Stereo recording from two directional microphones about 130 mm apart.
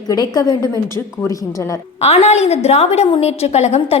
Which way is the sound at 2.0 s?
55° left (ahead or behind).